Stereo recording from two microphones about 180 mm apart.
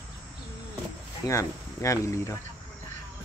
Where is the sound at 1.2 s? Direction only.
15° left (ahead or behind).